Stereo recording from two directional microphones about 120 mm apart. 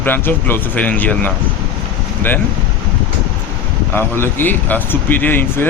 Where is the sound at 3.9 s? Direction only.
20° left (ahead or behind).